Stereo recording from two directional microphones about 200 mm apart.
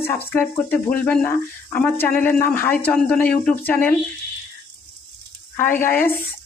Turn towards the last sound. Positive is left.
turn(degrees=45)  # may be behind; listen again after turning